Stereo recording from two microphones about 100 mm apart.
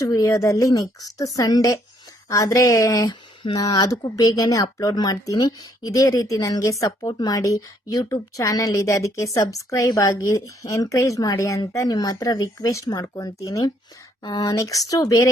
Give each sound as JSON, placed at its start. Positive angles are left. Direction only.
{"t": 0.1, "sound": "a woman's voice", "side_deg": 35}